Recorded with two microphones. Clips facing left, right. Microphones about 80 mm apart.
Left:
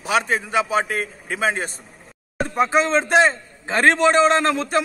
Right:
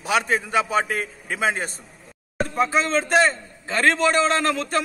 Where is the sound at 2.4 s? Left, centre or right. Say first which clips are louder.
Left 3 dB; left.